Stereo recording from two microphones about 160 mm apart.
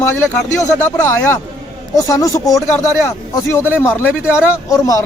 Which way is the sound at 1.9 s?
20° left (ahead or behind).